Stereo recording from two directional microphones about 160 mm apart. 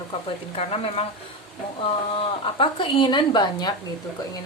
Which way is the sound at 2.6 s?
30° left (ahead or behind).